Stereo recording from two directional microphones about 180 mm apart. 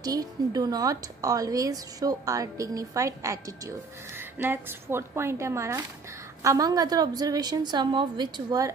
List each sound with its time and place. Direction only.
0.0 s a woman's voice: 20° right (ahead or behind)